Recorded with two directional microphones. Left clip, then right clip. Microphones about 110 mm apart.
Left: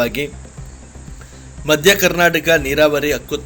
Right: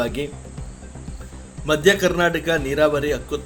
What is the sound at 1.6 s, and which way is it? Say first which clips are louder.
A man's voice: left 4 dB; 15° left (ahead or behind).